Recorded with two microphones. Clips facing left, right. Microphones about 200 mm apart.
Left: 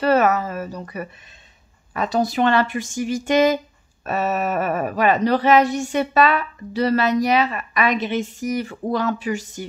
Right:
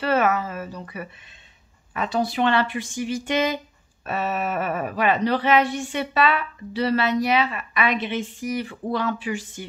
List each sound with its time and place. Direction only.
0.0 s speech: 40° left (ahead or behind)